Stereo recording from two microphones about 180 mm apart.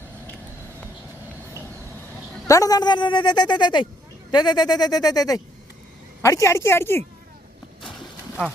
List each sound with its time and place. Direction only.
2.5 s a woman's voice: 20° left (ahead or behind)